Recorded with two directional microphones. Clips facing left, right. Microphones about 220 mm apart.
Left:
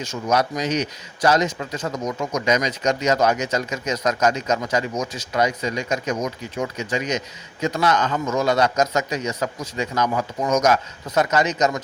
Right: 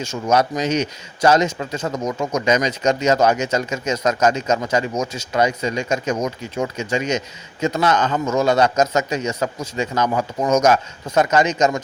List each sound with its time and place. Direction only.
0.0 s a man's voice: 30° right (ahead or behind)